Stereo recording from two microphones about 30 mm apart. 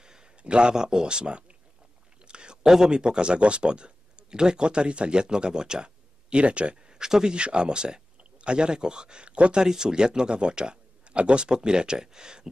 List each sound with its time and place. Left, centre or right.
0.0 s a sound: right
0.4 s a man's voice: right
6.3 s speech: right
6.8 s speech: right
7.3 s speech: right
9.6 s speech: right